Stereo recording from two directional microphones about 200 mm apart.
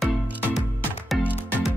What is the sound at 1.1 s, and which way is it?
Music, 10° left (ahead or behind).